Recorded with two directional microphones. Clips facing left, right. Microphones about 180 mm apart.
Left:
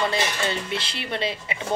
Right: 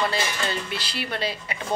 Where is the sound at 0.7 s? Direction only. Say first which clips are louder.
Left 1 dB; 25° left (ahead or behind).